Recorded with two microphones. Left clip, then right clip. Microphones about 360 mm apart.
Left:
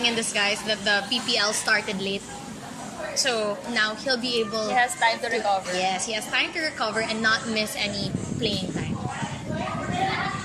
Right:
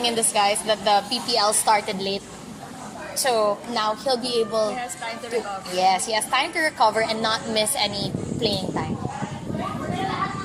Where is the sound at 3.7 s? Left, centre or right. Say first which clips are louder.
Right 2 dB; centre.